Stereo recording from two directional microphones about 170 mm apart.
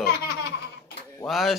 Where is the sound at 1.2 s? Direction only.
Centre (ahead or behind).